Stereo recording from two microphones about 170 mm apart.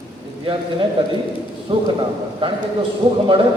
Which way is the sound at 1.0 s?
30° right (ahead or behind).